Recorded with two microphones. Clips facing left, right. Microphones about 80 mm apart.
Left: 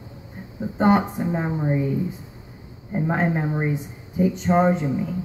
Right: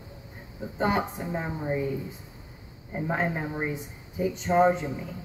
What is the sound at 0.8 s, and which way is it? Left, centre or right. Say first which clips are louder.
Speech: left 8 dB; left.